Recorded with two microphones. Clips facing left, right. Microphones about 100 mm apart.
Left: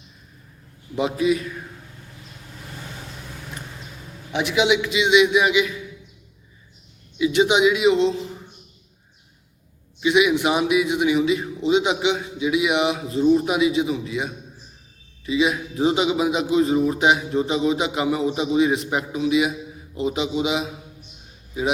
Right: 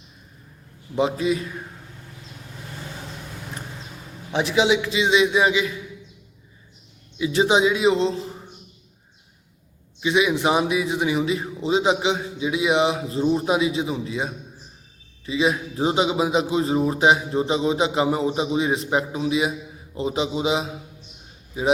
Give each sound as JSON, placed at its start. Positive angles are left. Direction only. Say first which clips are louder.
{"t": 0.9, "sound": "a man's voice", "louder": "left 1 dB", "side_deg": -30}
{"t": 4.3, "sound": "a man's voice", "louder": "even", "side_deg": -35}
{"t": 7.2, "sound": "a man's voice", "louder": "left 1 dB", "side_deg": -35}
{"t": 10.0, "sound": "a man's voice", "louder": "left 2 dB", "side_deg": -30}
{"t": 15.3, "sound": "a man's voice", "louder": "left 1 dB", "side_deg": -35}